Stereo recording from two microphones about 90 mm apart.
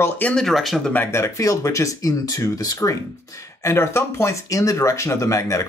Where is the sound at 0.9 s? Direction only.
25° left (ahead or behind).